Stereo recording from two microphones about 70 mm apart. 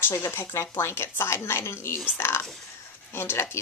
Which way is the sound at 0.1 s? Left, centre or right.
Left.